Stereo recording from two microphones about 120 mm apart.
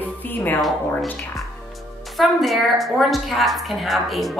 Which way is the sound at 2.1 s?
Centre (ahead or behind).